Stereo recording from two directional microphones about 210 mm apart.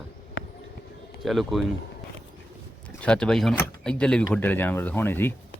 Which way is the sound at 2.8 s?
5° left (ahead or behind).